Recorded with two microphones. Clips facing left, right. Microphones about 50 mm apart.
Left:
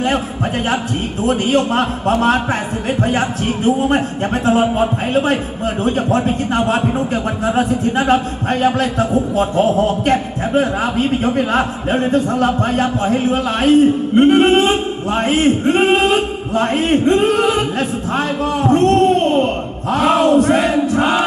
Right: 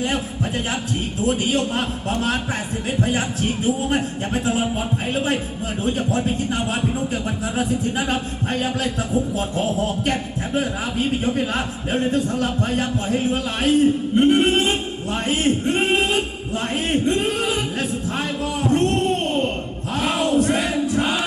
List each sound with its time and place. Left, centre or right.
1.2 s a man's voice: left